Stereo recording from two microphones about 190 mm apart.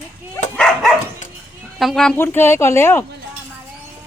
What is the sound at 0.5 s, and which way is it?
Dog, centre (ahead or behind).